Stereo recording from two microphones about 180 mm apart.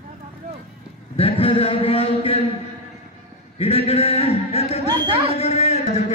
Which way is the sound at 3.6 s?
35° left (ahead or behind).